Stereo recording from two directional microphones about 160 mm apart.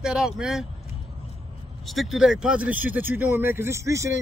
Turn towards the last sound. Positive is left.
turn(degrees=-20)  # may be behind; listen again after turning